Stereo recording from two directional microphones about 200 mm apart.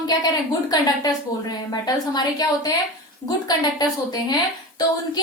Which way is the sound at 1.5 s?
20° left (ahead or behind).